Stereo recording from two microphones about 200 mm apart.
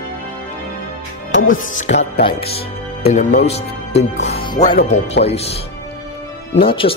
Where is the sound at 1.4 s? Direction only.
40° left (ahead or behind).